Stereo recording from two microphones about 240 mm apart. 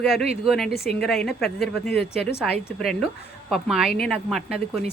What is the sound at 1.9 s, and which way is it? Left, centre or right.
Speech, left.